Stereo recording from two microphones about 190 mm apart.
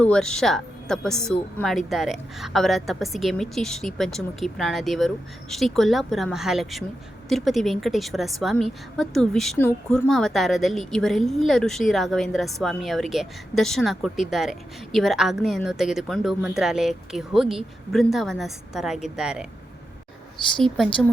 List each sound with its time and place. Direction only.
0.0 s speech: 5° left (ahead or behind)
10.1 s speech: centre (ahead or behind)
20.6 s speech: centre (ahead or behind)